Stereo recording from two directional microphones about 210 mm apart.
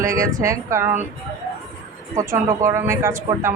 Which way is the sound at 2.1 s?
15° right (ahead or behind).